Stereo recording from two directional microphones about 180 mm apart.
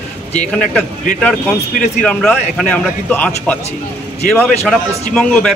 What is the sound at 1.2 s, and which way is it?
A man's voice, 5° left (ahead or behind).